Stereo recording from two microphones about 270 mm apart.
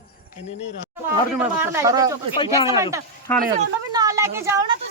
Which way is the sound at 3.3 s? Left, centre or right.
Centre.